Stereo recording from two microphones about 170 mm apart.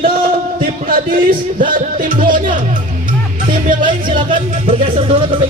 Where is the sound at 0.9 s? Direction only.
55° right (ahead or behind).